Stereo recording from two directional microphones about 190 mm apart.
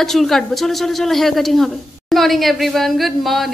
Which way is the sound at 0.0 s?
Centre (ahead or behind).